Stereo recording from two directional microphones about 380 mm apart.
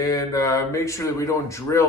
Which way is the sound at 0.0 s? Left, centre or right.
Centre.